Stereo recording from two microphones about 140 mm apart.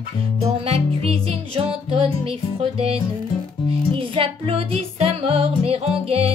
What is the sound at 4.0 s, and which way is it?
Music, 40° right (ahead or behind).